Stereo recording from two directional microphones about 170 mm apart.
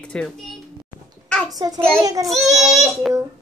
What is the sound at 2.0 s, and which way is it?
Child singing, 20° right (ahead or behind).